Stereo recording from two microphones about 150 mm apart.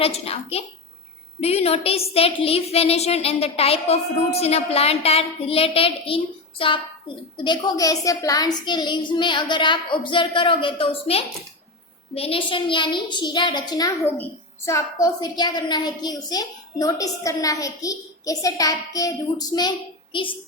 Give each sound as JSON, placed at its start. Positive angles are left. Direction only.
{"t": 0.0, "sound": "a woman's voice", "side_deg": 40}
{"t": 7.4, "sound": "a woman's voice", "side_deg": 25}